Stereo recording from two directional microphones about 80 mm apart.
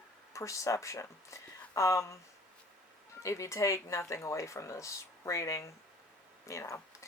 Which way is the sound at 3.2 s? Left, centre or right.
Left.